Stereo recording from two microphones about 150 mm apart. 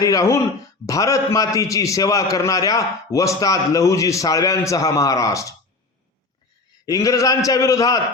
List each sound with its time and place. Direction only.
0.0 s a man's voice: 20° left (ahead or behind)
6.8 s a man's voice: 25° left (ahead or behind)